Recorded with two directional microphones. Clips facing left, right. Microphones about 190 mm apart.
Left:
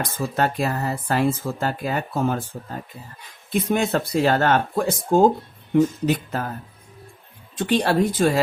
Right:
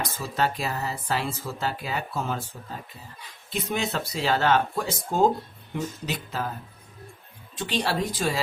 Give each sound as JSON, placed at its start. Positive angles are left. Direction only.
{"t": 0.0, "sound": "speech", "side_deg": 50}
{"t": 3.5, "sound": "speech", "side_deg": 50}
{"t": 7.5, "sound": "speech", "side_deg": 50}